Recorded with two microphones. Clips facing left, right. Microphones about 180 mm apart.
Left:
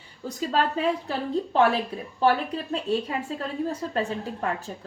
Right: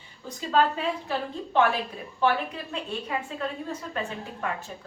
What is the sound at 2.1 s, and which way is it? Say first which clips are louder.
Speech: left 3 dB; 40° left (ahead or behind).